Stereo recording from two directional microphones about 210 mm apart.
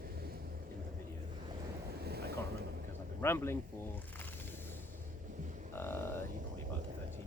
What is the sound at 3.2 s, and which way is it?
Speech, 10° left (ahead or behind).